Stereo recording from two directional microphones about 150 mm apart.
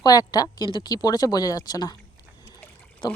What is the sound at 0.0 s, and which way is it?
Speech, 25° left (ahead or behind).